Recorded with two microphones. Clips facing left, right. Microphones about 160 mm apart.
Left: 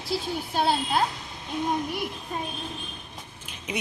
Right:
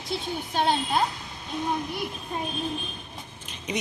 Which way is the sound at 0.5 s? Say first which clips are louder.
Even; 5° left (ahead or behind).